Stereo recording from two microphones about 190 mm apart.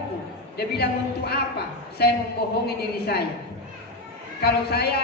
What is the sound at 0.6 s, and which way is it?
Speech, 55° left (ahead or behind).